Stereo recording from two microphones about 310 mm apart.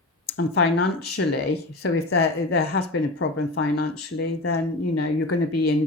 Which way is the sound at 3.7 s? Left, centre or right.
Left.